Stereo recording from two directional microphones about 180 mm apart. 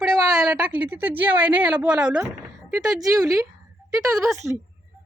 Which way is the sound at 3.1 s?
20° right (ahead or behind).